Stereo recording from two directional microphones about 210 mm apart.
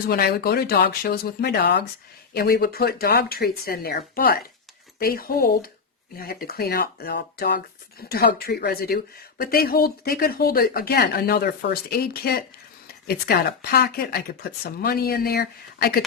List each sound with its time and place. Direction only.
0.1 s speech: 50° left (ahead or behind)